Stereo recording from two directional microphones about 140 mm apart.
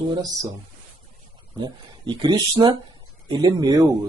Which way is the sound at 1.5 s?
30° right (ahead or behind).